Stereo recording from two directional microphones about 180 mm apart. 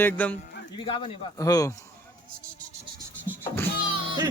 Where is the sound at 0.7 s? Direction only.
30° left (ahead or behind).